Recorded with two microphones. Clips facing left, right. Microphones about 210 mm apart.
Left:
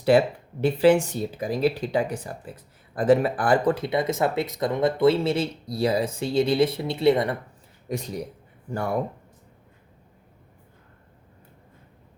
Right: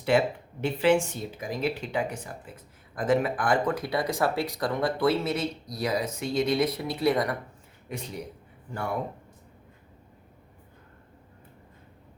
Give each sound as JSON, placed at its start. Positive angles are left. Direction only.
{"t": 0.1, "sound": "speech", "side_deg": 35}
{"t": 7.9, "sound": "speech", "side_deg": 40}